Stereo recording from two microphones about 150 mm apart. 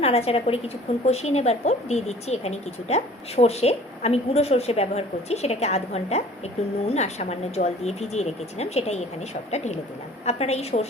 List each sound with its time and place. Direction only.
0.0 s a woman's voice: 40° left (ahead or behind)